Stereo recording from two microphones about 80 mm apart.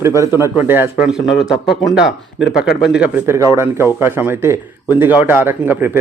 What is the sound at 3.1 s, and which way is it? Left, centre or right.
Speech, right.